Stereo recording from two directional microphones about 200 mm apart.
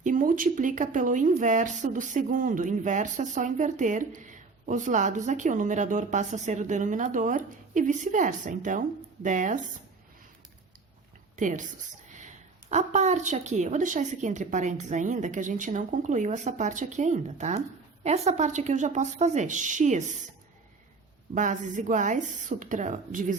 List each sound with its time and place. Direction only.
0.0 s speech: 40° right (ahead or behind)
11.3 s speech: 40° right (ahead or behind)
21.3 s speech: 40° right (ahead or behind)